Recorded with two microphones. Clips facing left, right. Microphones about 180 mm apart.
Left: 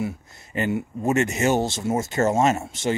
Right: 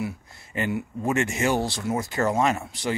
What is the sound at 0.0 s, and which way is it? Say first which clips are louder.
Speech: left 3 dB; 25° left (ahead or behind).